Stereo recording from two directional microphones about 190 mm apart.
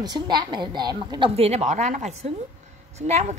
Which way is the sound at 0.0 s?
20° right (ahead or behind).